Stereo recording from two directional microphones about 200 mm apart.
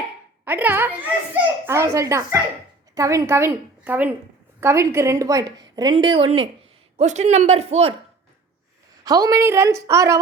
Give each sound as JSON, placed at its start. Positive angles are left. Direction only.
{"t": 0.4, "sound": "a child's voice", "side_deg": -10}
{"t": 9.0, "sound": "a child's voice", "side_deg": -20}